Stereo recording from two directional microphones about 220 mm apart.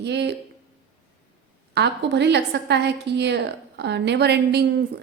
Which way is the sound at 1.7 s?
50° right (ahead or behind).